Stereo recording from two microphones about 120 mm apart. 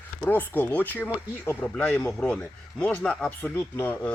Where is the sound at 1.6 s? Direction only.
5° left (ahead or behind).